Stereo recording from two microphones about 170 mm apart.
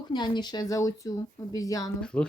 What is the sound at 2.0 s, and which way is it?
Speech, 5° left (ahead or behind).